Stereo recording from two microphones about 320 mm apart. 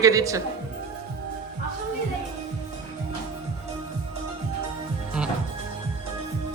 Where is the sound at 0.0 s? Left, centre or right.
Centre.